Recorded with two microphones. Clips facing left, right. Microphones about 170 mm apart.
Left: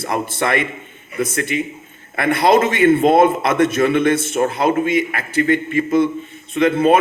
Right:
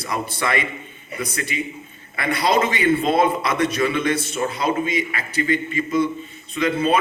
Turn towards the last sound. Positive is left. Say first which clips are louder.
# left 6 dB
turn(degrees=55)  # may be behind; listen again after turning